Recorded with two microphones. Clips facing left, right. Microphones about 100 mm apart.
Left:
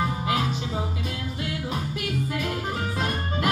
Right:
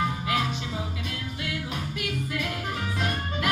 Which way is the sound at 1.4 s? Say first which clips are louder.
Left 3 dB; 40° left (ahead or behind).